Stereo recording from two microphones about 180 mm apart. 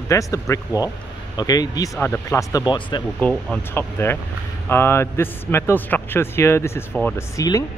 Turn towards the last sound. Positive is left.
turn(degrees=15)  # may be behind; listen again after turning